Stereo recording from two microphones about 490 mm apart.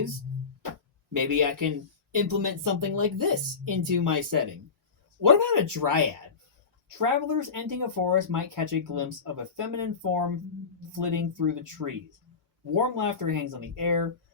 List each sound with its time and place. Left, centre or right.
1.1 s speech: right